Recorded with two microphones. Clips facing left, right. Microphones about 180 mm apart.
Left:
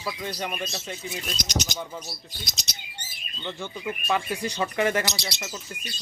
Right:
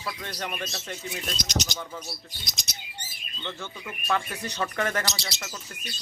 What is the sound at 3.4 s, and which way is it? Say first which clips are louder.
Speech: left 5 dB; 15° left (ahead or behind).